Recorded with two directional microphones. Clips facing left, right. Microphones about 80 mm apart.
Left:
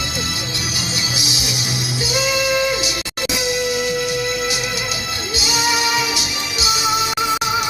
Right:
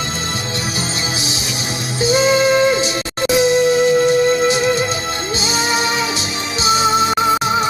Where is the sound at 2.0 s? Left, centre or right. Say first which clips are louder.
Right 8 dB; right.